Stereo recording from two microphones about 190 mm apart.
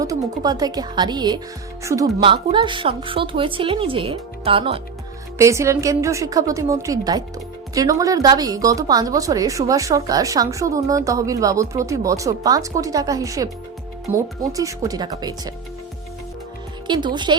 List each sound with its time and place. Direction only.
0.0 s a woman's voice: 20° right (ahead or behind)
5.4 s a woman's voice: 15° right (ahead or behind)
16.8 s a woman's voice: 25° right (ahead or behind)